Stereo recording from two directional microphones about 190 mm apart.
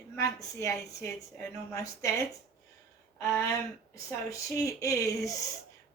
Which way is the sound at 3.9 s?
15° left (ahead or behind).